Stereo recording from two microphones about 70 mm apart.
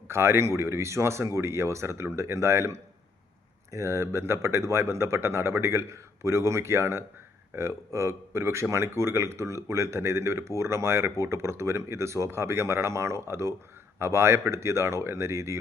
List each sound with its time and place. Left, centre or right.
0.1 s speech: right